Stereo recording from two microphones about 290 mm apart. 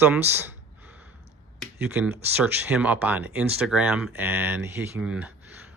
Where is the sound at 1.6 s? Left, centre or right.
Centre.